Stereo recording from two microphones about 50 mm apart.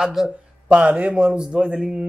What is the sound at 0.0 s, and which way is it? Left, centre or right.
Speech, centre.